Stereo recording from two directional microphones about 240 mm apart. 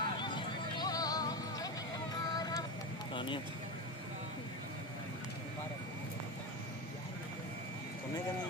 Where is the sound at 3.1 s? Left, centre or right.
Centre.